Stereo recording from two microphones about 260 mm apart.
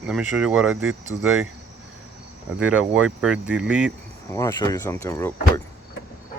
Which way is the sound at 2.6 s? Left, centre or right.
Centre.